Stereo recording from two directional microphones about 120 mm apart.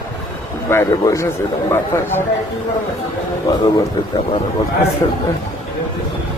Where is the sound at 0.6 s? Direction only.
25° left (ahead or behind).